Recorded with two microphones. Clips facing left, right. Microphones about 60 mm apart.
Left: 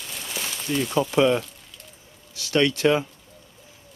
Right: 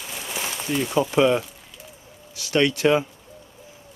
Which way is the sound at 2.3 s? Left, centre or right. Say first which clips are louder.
Right 1 dB; right.